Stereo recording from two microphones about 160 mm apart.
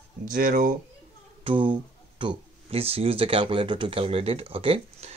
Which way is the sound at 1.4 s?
30° right (ahead or behind).